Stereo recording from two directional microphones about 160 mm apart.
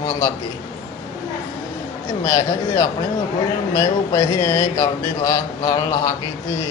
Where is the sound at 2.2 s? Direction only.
20° left (ahead or behind).